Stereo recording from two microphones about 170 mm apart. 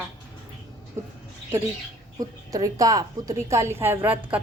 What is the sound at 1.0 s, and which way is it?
Speech, 15° right (ahead or behind).